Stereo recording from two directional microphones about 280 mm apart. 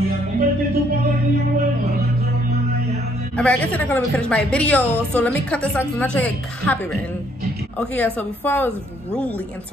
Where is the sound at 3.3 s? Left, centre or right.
Centre.